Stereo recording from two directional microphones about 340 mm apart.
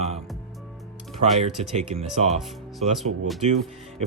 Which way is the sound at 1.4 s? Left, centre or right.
Centre.